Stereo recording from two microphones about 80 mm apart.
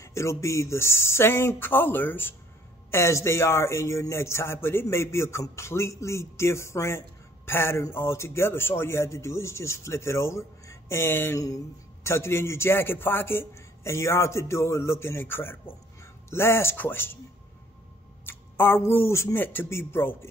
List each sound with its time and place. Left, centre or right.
0.0 s speech: left
2.9 s speech: left
11.3 s speech: left
18.2 s speech: left
19.3 s speech: left